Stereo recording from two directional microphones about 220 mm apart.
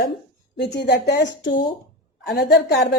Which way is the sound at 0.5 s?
50° left (ahead or behind).